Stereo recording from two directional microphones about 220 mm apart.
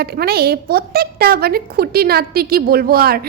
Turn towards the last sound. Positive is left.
turn(degrees=-45)  # may be behind; listen again after turning